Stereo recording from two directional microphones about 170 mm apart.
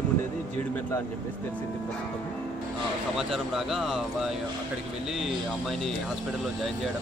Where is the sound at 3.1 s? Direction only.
5° right (ahead or behind).